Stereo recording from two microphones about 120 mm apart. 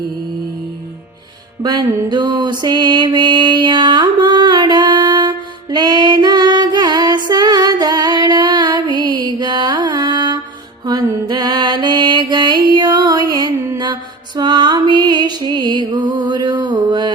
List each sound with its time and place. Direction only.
1.6 s mantra: 35° right (ahead or behind)